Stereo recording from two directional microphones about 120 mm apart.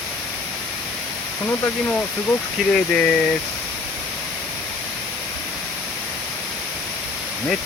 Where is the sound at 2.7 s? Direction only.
5° left (ahead or behind).